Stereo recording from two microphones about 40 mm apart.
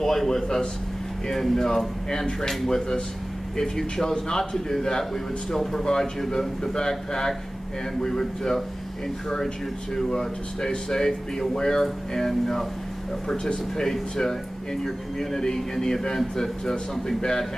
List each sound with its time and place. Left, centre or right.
0.0 s a man's voice: centre
9.9 s a man's voice: centre